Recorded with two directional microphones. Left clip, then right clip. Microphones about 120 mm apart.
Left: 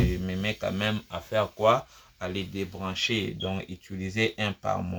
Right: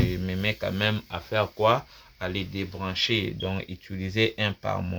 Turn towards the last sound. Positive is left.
turn(degrees=-45)  # may be behind; listen again after turning